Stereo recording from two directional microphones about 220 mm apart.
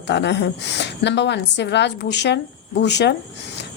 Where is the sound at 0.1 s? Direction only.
50° left (ahead or behind).